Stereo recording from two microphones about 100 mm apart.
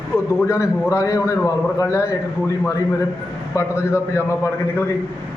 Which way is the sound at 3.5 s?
30° left (ahead or behind).